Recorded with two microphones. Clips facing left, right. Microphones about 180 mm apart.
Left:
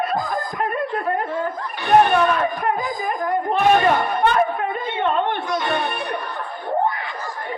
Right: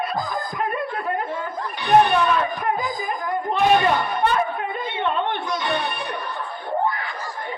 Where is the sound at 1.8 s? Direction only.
50° left (ahead or behind).